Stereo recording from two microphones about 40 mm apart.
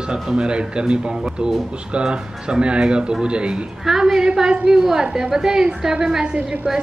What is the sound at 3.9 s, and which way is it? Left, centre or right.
A woman's voice, centre.